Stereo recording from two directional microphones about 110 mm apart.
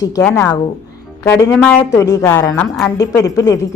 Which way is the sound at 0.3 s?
25° left (ahead or behind).